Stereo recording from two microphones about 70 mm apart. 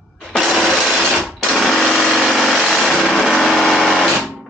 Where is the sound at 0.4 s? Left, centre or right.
Centre.